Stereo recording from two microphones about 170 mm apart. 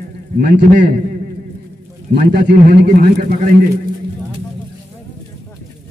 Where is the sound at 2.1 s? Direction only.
75° right (ahead or behind).